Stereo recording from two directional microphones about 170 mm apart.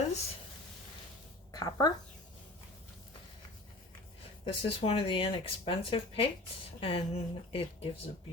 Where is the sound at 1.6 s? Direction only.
25° left (ahead or behind).